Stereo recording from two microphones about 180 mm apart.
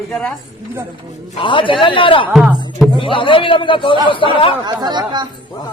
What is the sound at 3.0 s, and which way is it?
A man's voice, 30° left (ahead or behind).